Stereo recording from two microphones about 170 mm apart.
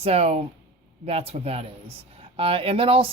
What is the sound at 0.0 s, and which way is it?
Speech, 35° right (ahead or behind).